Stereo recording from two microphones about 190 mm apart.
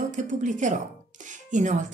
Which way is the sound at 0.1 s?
40° right (ahead or behind).